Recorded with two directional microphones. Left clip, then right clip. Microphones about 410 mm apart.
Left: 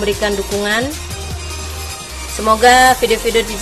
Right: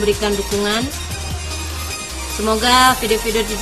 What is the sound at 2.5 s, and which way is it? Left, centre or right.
Speech, centre.